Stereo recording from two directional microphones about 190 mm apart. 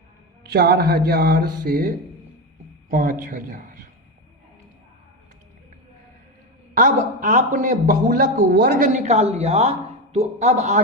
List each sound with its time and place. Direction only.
0.4 s a man's voice: 55° right (ahead or behind)
6.7 s a man's voice: 45° right (ahead or behind)